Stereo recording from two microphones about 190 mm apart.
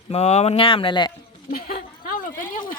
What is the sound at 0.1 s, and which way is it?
Speech, 35° left (ahead or behind).